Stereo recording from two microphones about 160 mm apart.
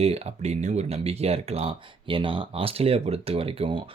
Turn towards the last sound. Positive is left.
turn(degrees=-35)  # may be behind; listen again after turning